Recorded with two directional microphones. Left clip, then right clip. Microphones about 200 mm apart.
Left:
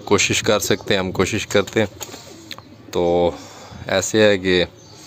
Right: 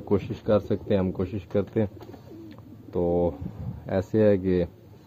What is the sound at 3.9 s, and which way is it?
Speech, 10° left (ahead or behind).